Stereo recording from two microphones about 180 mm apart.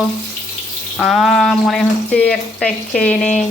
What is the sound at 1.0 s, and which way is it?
Speech, centre (ahead or behind).